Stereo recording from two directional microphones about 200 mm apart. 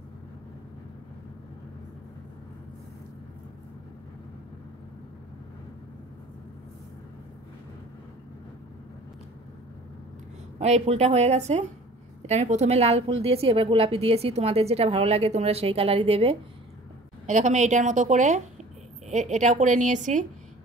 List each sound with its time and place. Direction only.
10.6 s a woman's voice: 35° right (ahead or behind)